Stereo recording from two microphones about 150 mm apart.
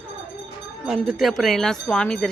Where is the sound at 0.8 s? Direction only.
Centre (ahead or behind).